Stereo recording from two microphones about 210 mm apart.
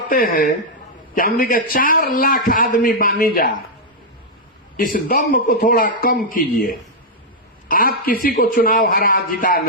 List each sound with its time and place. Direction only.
0.1 s a man's voice: 40° left (ahead or behind)
4.8 s a man's voice: 40° left (ahead or behind)